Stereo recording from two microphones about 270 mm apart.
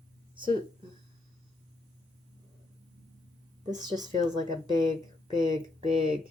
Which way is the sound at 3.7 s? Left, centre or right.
Centre.